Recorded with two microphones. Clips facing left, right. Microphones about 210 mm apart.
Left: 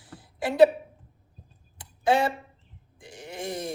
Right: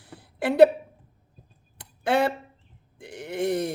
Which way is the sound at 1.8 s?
60° right (ahead or behind).